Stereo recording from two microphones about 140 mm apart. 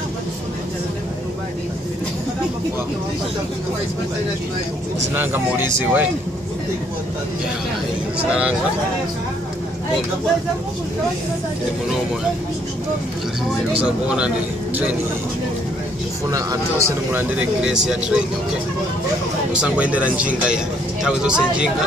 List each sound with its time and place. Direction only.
5.1 s speech: 15° right (ahead or behind)
13.7 s speech: 5° right (ahead or behind)
16.3 s speech: 25° right (ahead or behind); by 18.2 s 5° right (ahead or behind)
19.5 s speech: 10° right (ahead or behind)